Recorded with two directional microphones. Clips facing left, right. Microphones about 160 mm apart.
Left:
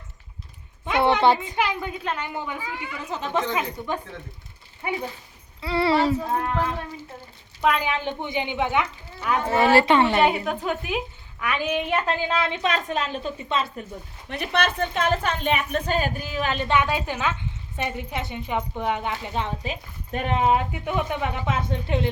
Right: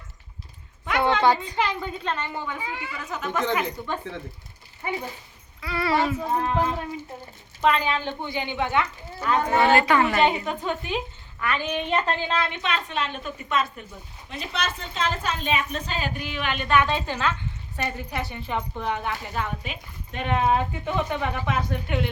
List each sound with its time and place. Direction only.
0.9 s a sound: 20° left (ahead or behind)
1.5 s a woman's voice: 10° left (ahead or behind)
3.0 s a woman's voice: 30° left (ahead or behind)
3.5 s a woman's voice: 15° left (ahead or behind)
5.6 s a woman's voice: 30° left (ahead or behind)
6.2 s speech: 10° right (ahead or behind)
7.6 s a woman's voice: 10° left (ahead or behind)
9.7 s a woman's voice: 25° left (ahead or behind)
10.2 s a woman's voice: 5° left (ahead or behind)
12.5 s a woman's voice: 40° left (ahead or behind)
14.3 s a woman's voice: 65° left (ahead or behind); by 16.6 s 35° left (ahead or behind)
16.6 s a woman's voice: 20° left (ahead or behind); by 20.3 s 35° left (ahead or behind)
20.3 s a woman's voice: 15° left (ahead or behind); by 22.1 s 30° left (ahead or behind)